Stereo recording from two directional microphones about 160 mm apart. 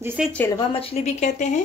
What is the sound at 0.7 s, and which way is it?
Speech, 40° left (ahead or behind).